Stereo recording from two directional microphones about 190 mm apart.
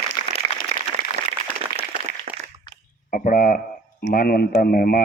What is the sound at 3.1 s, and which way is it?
Speech, 45° left (ahead or behind).